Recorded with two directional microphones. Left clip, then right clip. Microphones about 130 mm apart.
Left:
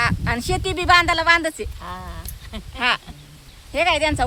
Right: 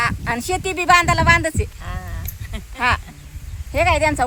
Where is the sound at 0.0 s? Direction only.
25° right (ahead or behind).